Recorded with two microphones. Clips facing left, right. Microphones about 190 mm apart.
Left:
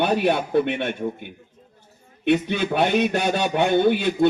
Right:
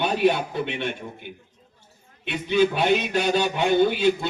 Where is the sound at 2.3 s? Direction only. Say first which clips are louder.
Left 1 dB; 55° left (ahead or behind).